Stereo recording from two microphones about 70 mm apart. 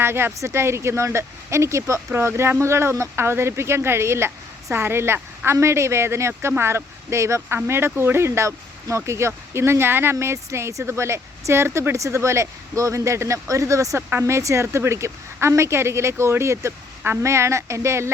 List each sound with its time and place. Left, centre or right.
0.0 s speech: right